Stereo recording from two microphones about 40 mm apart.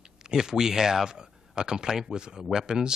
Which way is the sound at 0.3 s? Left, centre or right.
Centre.